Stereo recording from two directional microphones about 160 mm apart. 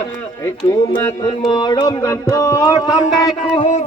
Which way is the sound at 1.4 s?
30° left (ahead or behind).